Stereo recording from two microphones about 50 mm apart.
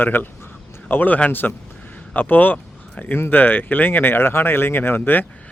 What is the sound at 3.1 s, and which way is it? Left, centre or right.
Speech, left.